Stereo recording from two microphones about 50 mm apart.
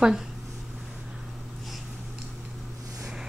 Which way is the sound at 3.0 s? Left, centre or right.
Centre.